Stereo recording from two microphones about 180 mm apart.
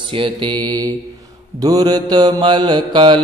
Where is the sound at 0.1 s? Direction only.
25° right (ahead or behind).